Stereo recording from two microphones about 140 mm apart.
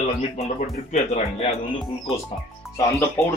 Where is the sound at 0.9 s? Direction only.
50° left (ahead or behind).